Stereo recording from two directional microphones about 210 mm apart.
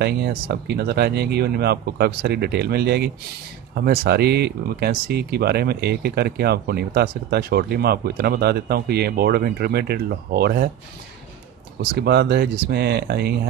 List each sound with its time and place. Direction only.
0.0 s speech: 50° right (ahead or behind)
11.8 s speech: 50° right (ahead or behind)